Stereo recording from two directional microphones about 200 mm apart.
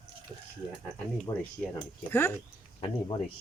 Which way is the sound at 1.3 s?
20° left (ahead or behind).